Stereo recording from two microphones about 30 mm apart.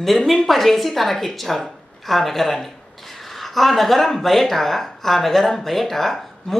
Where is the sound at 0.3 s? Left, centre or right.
Centre.